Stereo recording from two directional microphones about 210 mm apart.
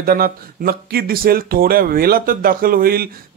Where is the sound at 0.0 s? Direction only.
45° right (ahead or behind).